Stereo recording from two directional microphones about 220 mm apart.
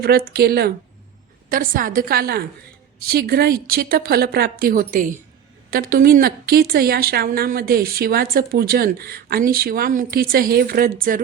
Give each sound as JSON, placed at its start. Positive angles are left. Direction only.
{"t": 0.0, "sound": "a woman's voice", "side_deg": -45}